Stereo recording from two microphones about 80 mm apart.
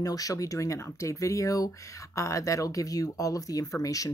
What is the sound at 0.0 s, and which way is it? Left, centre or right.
Speech, left.